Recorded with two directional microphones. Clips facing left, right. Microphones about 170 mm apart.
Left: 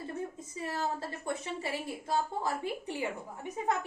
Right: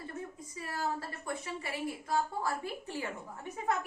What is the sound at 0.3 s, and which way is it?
A woman's voice, 25° left (ahead or behind).